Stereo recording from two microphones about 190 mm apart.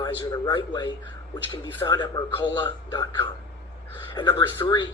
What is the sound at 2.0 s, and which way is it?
A man's voice, 25° left (ahead or behind).